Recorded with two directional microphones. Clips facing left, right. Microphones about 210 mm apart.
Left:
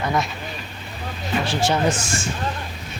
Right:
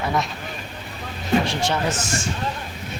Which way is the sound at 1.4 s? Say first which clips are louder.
Left 2 dB; 5° left (ahead or behind).